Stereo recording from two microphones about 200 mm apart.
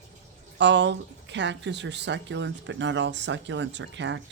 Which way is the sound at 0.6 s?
60° right (ahead or behind).